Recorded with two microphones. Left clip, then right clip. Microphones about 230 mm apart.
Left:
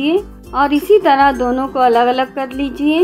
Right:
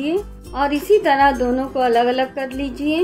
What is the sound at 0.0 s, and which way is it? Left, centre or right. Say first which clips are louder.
A woman's voice: left 6 dB; centre.